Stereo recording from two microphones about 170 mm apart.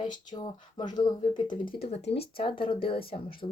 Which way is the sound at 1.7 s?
35° left (ahead or behind).